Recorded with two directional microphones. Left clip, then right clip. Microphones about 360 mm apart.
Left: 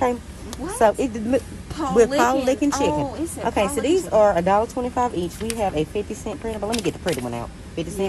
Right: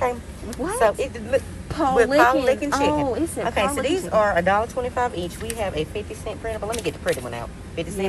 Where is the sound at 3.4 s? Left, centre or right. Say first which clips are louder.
Left 2 dB; left.